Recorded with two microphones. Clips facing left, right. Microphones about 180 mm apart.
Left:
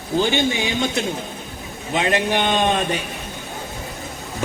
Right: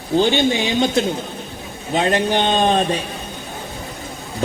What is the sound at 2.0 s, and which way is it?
Speech, 35° right (ahead or behind).